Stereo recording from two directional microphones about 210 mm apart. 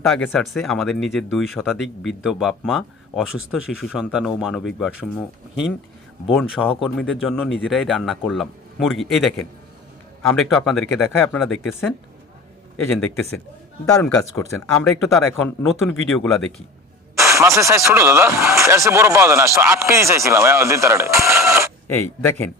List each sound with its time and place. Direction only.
0.0 s speech: centre (ahead or behind)
10.3 s speech: centre (ahead or behind)
13.8 s speech: 15° left (ahead or behind)
14.3 s speech: centre (ahead or behind)
17.2 s speech: 15° right (ahead or behind)
21.8 s speech: 10° left (ahead or behind)